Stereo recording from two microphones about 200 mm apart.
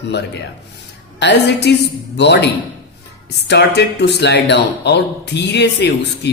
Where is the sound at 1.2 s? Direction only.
55° left (ahead or behind).